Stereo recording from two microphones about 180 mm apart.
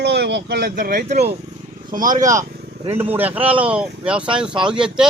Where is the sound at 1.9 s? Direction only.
50° right (ahead or behind).